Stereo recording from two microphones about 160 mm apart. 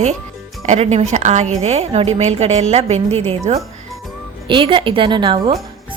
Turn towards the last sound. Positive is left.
turn(degrees=-30)  # may be behind; listen again after turning